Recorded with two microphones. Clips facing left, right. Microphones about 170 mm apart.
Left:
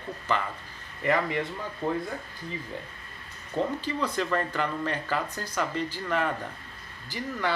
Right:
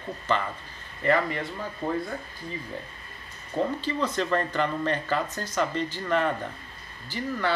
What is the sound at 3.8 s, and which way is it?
A man's voice, 10° left (ahead or behind).